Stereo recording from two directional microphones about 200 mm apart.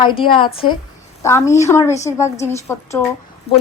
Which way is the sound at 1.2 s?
15° left (ahead or behind).